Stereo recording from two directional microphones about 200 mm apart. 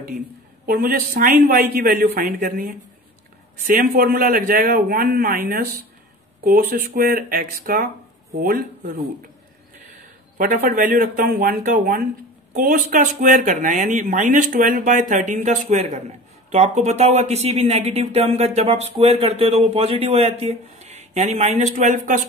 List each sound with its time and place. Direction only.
0.7 s speech: 50° right (ahead or behind)
6.4 s speech: 45° right (ahead or behind)
10.3 s speech: 40° right (ahead or behind)